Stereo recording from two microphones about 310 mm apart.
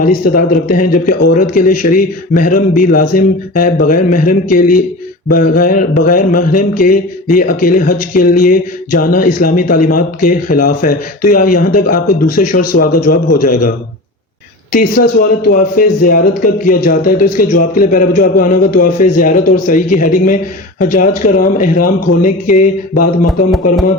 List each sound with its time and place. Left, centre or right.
0.0 s speech: left
14.7 s speech: left